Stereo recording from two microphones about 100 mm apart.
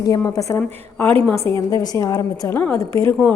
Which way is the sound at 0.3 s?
30° left (ahead or behind).